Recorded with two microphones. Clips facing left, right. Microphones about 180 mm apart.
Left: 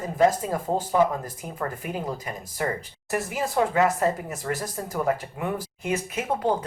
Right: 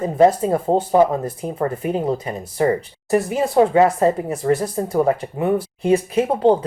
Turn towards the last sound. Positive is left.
turn(degrees=-30)  # may be behind; listen again after turning